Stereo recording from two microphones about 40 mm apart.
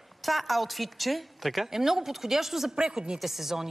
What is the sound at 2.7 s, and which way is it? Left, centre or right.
Speech, centre.